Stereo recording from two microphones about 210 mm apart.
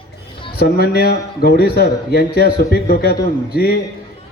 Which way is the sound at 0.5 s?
50° left (ahead or behind).